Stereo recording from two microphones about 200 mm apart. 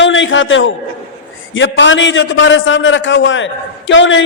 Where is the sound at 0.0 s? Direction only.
70° left (ahead or behind).